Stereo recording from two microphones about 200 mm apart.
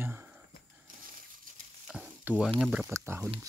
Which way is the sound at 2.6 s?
5° right (ahead or behind).